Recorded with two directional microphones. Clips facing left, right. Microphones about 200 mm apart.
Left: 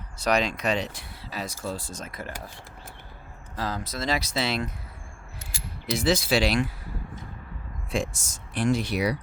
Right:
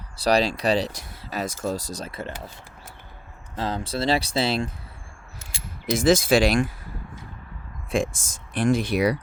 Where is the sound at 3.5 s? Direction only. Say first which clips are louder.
Right 4 dB; 25° right (ahead or behind).